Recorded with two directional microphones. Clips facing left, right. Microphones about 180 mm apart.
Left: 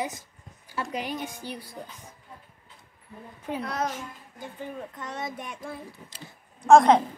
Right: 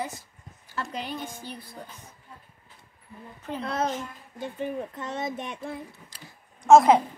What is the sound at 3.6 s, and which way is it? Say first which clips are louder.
Speech: right 3 dB; 25° right (ahead or behind).